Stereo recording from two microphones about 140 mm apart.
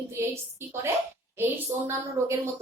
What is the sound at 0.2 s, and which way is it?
Speech, 20° right (ahead or behind).